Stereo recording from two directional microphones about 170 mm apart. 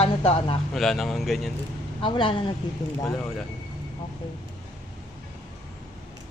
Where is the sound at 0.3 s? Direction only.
35° left (ahead or behind).